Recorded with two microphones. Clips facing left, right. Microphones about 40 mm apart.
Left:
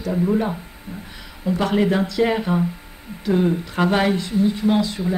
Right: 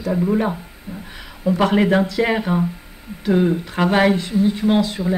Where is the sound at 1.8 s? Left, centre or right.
Right.